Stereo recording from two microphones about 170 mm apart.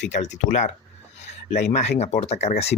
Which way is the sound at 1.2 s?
40° left (ahead or behind).